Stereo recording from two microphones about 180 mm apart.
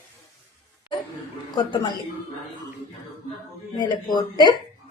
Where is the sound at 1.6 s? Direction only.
25° left (ahead or behind).